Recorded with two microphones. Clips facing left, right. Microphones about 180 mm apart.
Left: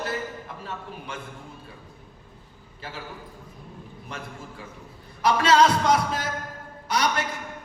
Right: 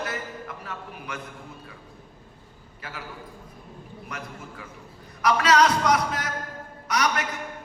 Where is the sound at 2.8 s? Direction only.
30° left (ahead or behind).